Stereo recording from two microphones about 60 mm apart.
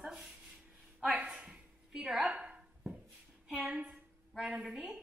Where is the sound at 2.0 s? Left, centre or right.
Centre.